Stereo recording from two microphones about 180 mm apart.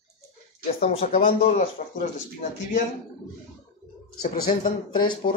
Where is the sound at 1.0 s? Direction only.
45° left (ahead or behind).